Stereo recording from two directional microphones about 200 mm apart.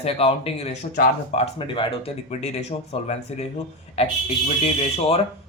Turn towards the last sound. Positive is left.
turn(degrees=30)  # may be behind; listen again after turning